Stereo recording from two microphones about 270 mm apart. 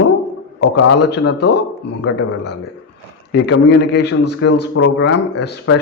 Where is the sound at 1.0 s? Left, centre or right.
Left.